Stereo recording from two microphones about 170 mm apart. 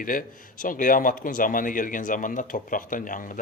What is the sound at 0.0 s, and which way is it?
A man's voice, 55° left (ahead or behind).